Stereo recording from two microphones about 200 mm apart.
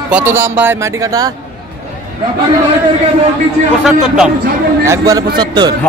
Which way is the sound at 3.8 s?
Centre (ahead or behind).